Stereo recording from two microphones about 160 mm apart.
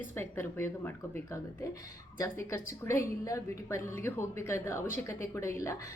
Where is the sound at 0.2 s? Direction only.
15° left (ahead or behind).